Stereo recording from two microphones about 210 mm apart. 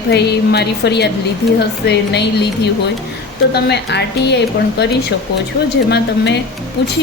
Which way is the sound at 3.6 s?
55° left (ahead or behind).